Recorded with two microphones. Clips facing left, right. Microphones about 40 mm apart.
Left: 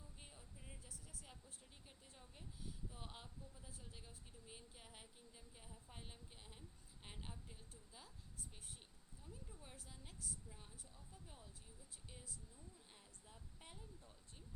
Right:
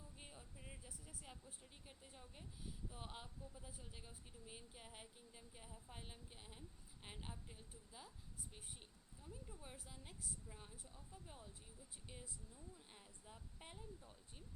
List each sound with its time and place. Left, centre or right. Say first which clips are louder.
0.2 s speech: right 3 dB; centre
9.2 s speech: right 3 dB; centre